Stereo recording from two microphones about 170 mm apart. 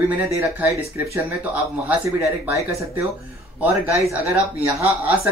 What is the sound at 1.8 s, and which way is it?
Speech, 10° right (ahead or behind).